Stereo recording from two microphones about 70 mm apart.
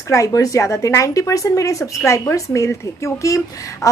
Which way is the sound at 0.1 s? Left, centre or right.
Left.